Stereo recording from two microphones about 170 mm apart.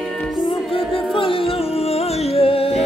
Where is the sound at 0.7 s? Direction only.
30° left (ahead or behind).